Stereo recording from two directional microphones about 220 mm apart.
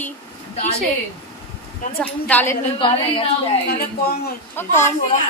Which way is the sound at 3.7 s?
45° left (ahead or behind).